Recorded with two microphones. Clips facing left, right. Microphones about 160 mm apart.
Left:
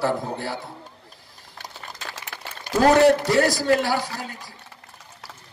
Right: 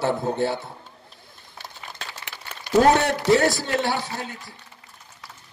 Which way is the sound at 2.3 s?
55° left (ahead or behind).